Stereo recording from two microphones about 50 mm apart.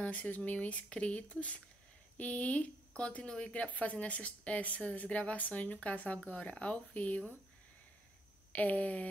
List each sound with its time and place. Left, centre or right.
0.0 s speech: left
8.5 s speech: left